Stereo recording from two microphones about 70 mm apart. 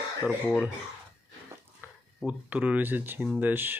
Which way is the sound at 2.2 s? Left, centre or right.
Right.